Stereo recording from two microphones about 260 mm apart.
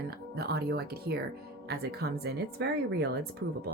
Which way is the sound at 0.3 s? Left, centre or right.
Right.